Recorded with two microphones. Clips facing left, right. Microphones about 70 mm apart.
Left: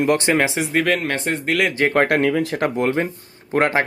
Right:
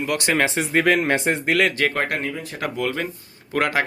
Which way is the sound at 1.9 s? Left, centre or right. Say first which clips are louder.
Left 7 dB; left.